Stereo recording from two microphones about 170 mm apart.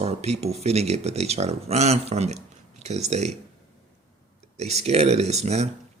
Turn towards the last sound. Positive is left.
turn(degrees=-40)  # may be behind; listen again after turning